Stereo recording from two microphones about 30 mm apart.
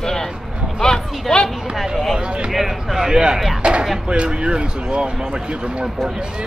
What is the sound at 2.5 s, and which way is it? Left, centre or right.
Speech, centre.